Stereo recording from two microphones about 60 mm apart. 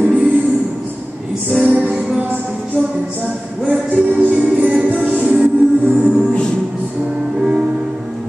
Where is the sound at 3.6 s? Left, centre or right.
Right.